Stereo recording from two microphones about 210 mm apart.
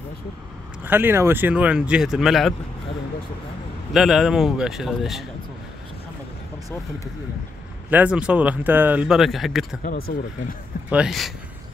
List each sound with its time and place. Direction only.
0.8 s speech: 10° right (ahead or behind)
3.9 s speech: centre (ahead or behind)
7.9 s speech: 5° right (ahead or behind)
9.8 s speech: 45° left (ahead or behind)
10.9 s speech: 5° right (ahead or behind)